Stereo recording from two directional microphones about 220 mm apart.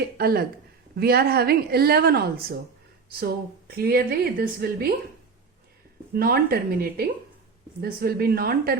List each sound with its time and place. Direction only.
0.2 s a woman's voice: 45° right (ahead or behind)
6.1 s a woman's voice: 45° right (ahead or behind)